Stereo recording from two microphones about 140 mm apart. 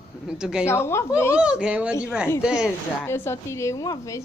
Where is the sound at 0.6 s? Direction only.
20° left (ahead or behind).